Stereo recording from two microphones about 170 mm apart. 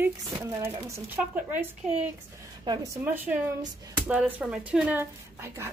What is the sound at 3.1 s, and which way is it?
Speech, 10° right (ahead or behind).